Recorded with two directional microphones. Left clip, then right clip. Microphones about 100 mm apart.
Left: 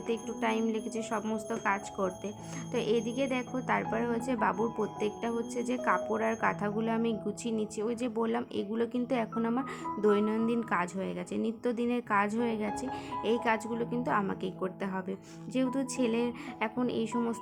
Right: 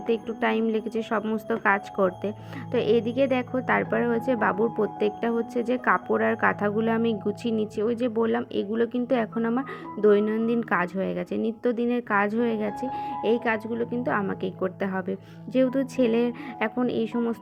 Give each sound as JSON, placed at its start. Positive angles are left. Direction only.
{"t": 0.1, "sound": "speech", "side_deg": -40}